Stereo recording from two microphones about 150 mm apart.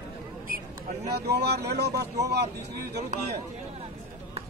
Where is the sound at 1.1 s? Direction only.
90° right.